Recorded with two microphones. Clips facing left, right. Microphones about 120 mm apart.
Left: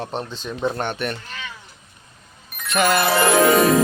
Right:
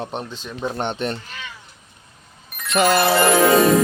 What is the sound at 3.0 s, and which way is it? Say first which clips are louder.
Speech: right 1 dB; centre (ahead or behind).